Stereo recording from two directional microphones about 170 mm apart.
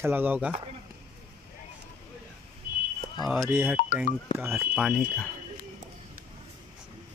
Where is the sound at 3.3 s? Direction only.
10° right (ahead or behind).